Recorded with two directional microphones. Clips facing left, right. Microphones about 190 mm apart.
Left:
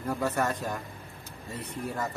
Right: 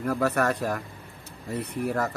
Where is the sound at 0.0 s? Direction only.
70° right (ahead or behind).